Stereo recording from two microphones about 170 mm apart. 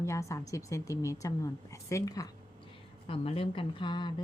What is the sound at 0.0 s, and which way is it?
A woman's voice, 15° left (ahead or behind).